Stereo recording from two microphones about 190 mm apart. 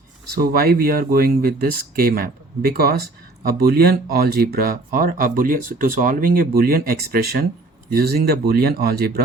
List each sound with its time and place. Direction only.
0.3 s speech: 55° right (ahead or behind)